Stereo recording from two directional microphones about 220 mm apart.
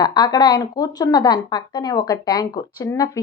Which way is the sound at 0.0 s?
20° left (ahead or behind).